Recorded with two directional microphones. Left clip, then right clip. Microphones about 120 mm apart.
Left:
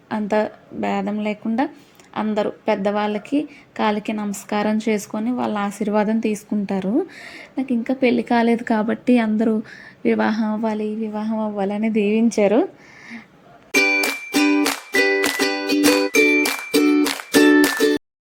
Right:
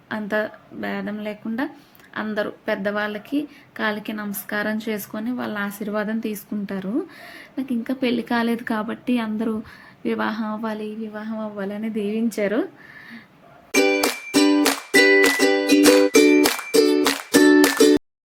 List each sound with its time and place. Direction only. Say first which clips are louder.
0.1 s a woman's voice: left 4 dB; 25° left (ahead or behind)
13.7 s music: left 2 dB; 5° right (ahead or behind)